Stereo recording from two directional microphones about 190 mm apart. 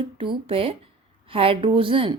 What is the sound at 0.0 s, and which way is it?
Speech, 25° right (ahead or behind).